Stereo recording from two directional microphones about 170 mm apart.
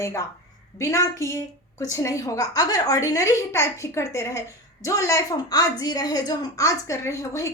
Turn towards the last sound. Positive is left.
turn(degrees=20)  # may be behind; listen again after turning